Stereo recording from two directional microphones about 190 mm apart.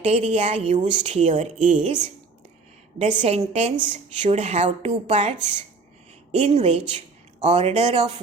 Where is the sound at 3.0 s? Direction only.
35° right (ahead or behind).